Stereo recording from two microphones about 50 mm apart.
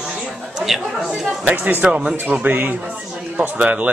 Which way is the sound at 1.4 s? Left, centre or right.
Right.